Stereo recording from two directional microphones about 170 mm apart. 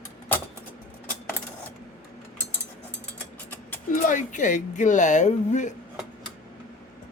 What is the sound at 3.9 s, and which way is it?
Speech, 50° left (ahead or behind).